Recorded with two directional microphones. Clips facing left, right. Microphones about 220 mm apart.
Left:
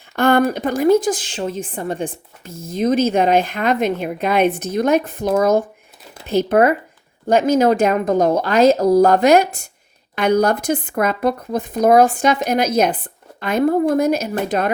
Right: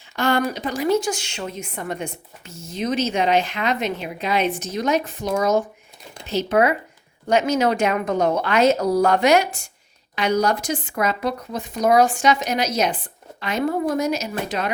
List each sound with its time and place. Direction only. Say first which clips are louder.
0.2 s a sound: left 6 dB; 55° left (ahead or behind)
0.5 s speech: left 6 dB; 55° left (ahead or behind)
1.4 s a woman's voice: left 6 dB; 30° left (ahead or behind)
2.5 s speech: left 7 dB; 90° left
2.7 s a woman's voice: left 6 dB; 55° left (ahead or behind)
10.2 s speech: left 4 dB; 55° left (ahead or behind)